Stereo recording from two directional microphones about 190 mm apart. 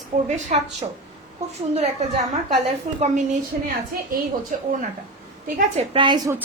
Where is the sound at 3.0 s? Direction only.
40° right (ahead or behind).